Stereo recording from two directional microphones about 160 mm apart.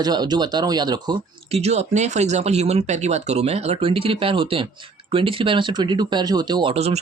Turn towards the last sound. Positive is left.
turn(degrees=-40)  # may be behind; listen again after turning